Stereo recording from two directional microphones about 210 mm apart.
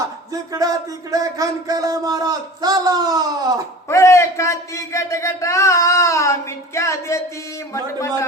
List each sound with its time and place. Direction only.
0.5 s music: 15° right (ahead or behind)
3.8 s a man's voice: 15° left (ahead or behind)